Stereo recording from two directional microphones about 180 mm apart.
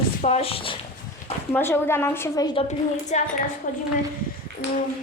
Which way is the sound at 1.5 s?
10° left (ahead or behind).